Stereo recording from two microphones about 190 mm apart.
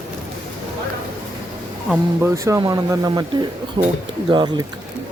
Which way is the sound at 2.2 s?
15° right (ahead or behind).